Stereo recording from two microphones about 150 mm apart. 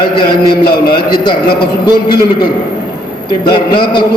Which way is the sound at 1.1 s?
30° left (ahead or behind).